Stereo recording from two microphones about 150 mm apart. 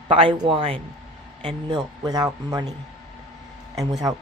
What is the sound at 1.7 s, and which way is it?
Speech, 25° right (ahead or behind).